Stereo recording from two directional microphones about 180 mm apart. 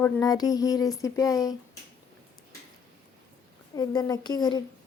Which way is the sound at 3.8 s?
20° left (ahead or behind).